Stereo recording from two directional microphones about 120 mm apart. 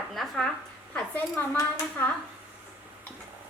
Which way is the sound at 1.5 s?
25° left (ahead or behind).